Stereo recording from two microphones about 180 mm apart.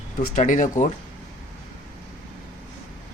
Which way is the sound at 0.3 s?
45° left (ahead or behind).